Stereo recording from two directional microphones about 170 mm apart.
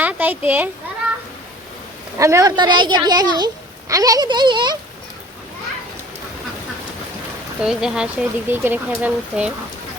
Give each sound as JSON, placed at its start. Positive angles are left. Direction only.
{"t": 0.0, "sound": "speech", "side_deg": -10}
{"t": 2.1, "sound": "a child's voice", "side_deg": -20}
{"t": 7.6, "sound": "speech", "side_deg": -5}